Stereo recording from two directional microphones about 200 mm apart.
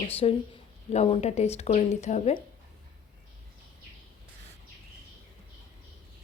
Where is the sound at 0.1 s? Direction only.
30° left (ahead or behind).